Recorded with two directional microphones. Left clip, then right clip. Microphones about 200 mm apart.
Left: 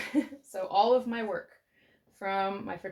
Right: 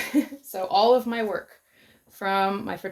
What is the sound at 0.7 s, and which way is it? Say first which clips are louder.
Speech: right 5 dB; 50° right (ahead or behind).